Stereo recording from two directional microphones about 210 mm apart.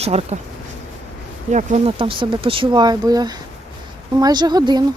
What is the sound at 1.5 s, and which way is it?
Speech, 30° right (ahead or behind).